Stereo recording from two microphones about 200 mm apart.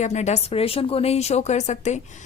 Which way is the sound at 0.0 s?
35° left (ahead or behind).